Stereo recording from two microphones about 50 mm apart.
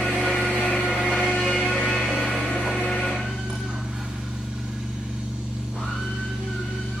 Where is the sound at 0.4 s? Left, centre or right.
Centre.